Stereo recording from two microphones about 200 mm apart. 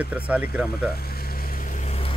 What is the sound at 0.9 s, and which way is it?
Vehicle, 50° left (ahead or behind).